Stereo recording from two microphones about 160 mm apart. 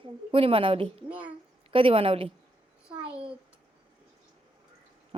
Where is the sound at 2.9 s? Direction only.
35° right (ahead or behind).